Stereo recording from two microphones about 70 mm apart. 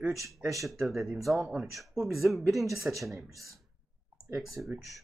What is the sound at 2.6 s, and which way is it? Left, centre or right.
Speech, right.